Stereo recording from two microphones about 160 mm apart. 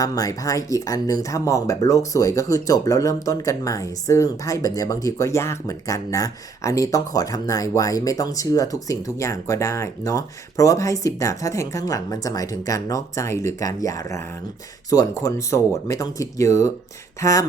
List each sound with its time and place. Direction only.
0.0 s speech: 20° left (ahead or behind)